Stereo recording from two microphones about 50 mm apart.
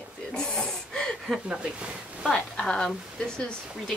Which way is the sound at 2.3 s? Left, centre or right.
Centre.